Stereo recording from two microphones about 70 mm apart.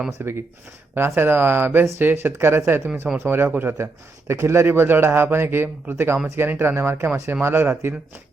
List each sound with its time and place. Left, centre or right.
0.1 s speech: right